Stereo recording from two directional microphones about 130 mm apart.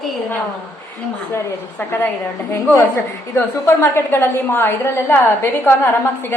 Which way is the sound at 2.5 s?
20° left (ahead or behind).